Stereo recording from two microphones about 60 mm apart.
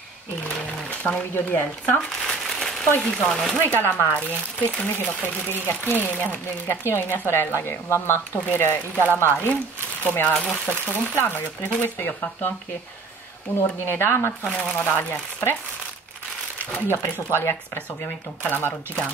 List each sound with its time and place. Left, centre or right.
0.8 s a sound: centre
1.3 s speech: left
2.2 s crumpling: centre
3.0 s speech: centre
3.6 s speech: left
5.2 s speech: left
10.0 s speech: left
13.6 s speech: left
16.5 s speech: left
16.9 s speech: left